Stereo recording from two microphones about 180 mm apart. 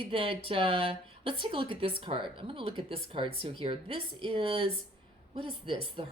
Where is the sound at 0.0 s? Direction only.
30° right (ahead or behind).